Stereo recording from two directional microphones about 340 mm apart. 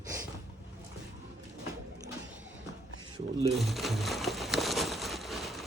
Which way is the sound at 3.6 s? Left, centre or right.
Centre.